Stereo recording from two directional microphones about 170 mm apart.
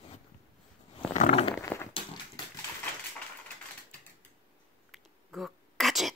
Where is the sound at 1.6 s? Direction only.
15° left (ahead or behind).